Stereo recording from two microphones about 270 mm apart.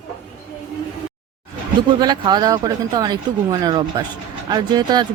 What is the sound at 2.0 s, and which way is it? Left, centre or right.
Speech, centre.